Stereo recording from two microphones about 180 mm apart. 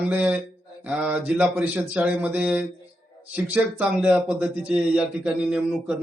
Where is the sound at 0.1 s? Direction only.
10° right (ahead or behind).